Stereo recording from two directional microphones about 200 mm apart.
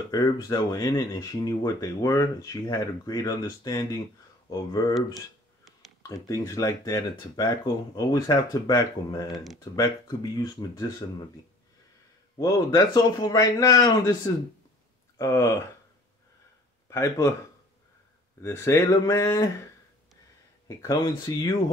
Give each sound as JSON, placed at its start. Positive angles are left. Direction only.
{"t": 0.1, "sound": "speech", "side_deg": 15}
{"t": 6.0, "sound": "speech", "side_deg": 15}
{"t": 9.3, "sound": "speech", "side_deg": 0}
{"t": 9.8, "sound": "speech", "side_deg": 20}
{"t": 12.4, "sound": "speech", "side_deg": 15}
{"t": 16.9, "sound": "speech", "side_deg": 15}
{"t": 18.4, "sound": "speech", "side_deg": 15}
{"t": 20.6, "sound": "speech", "side_deg": 15}